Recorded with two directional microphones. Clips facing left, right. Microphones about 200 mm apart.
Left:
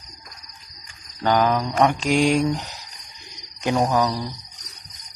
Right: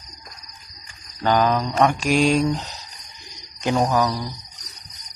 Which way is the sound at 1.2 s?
15° left (ahead or behind).